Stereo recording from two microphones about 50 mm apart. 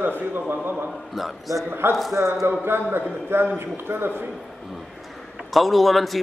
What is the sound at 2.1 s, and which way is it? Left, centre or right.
Speech, right.